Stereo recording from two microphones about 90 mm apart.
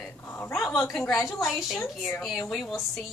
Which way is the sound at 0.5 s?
Centre (ahead or behind).